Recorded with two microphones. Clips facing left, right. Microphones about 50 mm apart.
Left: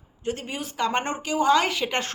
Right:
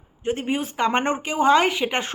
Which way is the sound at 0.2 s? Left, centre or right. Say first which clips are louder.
Right 6 dB; right.